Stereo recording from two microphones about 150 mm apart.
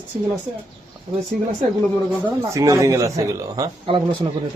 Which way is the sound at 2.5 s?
20° right (ahead or behind).